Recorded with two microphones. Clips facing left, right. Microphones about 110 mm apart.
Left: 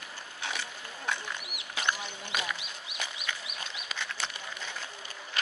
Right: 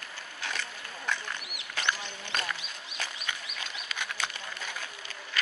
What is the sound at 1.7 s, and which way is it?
Duck, 10° left (ahead or behind).